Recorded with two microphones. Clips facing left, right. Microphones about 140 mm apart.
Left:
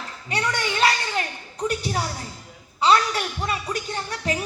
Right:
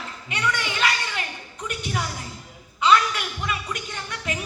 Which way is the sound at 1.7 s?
35° left (ahead or behind).